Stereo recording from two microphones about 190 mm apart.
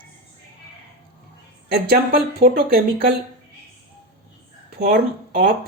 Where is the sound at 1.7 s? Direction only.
55° right (ahead or behind).